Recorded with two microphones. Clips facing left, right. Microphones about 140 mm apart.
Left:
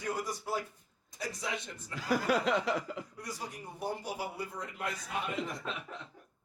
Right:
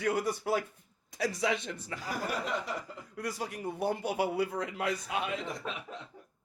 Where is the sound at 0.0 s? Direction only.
75° right (ahead or behind); by 2.0 s 90° right.